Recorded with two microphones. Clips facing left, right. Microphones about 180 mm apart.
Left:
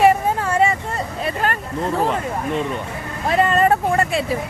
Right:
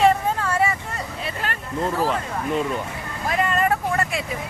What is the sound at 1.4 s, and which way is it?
Hubbub, 50° left (ahead or behind).